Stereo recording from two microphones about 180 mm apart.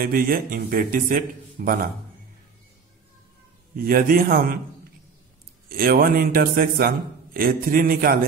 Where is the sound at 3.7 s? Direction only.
55° right (ahead or behind).